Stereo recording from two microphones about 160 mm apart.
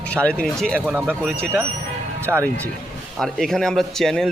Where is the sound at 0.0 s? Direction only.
5° left (ahead or behind).